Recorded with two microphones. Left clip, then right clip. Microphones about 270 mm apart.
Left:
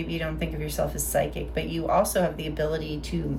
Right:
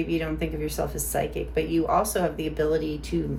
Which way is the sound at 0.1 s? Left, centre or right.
Centre.